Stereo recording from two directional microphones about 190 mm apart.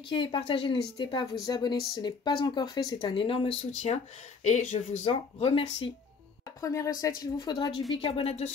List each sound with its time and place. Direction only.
0.1 s speech: 25° left (ahead or behind)
6.6 s speech: 15° left (ahead or behind); by 8.5 s 30° left (ahead or behind)